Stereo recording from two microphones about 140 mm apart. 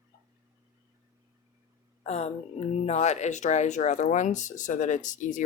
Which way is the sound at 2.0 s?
50° left (ahead or behind).